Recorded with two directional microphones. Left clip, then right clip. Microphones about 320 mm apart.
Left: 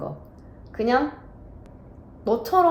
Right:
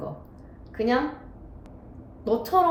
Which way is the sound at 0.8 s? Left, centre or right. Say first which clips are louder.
Left 1 dB; centre.